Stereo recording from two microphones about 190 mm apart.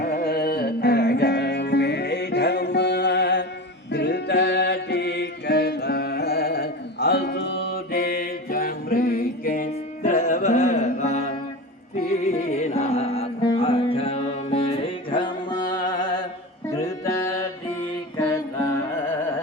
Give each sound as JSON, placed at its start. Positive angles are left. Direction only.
{"t": 0.0, "sound": "music", "side_deg": 55}
{"t": 17.0, "sound": "music", "side_deg": 15}